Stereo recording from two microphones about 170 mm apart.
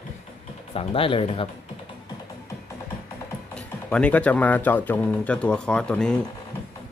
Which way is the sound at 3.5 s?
5° left (ahead or behind).